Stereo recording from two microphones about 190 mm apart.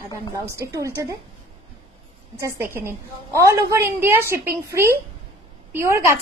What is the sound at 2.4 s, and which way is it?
A woman's voice, 10° right (ahead or behind).